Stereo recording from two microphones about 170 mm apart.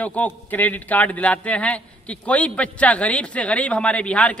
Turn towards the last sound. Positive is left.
turn(degrees=5)  # may be behind; listen again after turning